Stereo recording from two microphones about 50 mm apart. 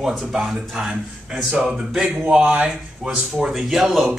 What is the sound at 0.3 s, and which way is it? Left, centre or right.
Speech, centre.